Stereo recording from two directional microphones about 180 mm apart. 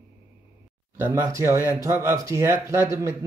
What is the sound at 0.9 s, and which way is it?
Speech, 15° right (ahead or behind).